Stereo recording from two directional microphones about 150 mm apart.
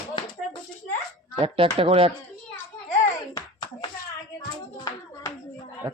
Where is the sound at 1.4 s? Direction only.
35° right (ahead or behind).